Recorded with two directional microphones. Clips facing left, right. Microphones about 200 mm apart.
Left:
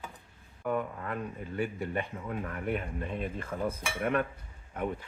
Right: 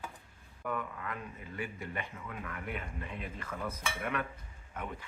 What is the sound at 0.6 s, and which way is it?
Speech, 35° left (ahead or behind).